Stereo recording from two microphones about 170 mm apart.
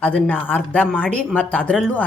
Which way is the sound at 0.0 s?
10° left (ahead or behind).